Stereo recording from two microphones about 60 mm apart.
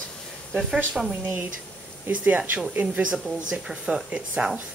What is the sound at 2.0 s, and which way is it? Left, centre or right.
Speech, right.